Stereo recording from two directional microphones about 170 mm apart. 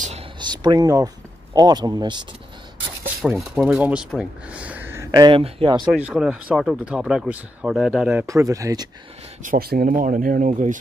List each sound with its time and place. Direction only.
0.4 s speech: 25° right (ahead or behind)
3.3 s speech: 5° right (ahead or behind); by 5.9 s 30° right (ahead or behind)
5.9 s speech: 5° right (ahead or behind)
9.4 s speech: 60° right (ahead or behind)